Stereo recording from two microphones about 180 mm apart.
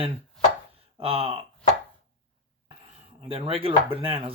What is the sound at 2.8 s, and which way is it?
Speech, 35° right (ahead or behind).